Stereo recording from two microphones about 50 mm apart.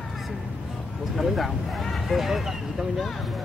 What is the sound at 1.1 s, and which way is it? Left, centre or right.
Speech, centre.